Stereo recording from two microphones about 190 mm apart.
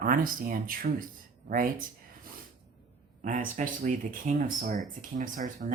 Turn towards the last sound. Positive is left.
turn(degrees=-45)  # may be behind; listen again after turning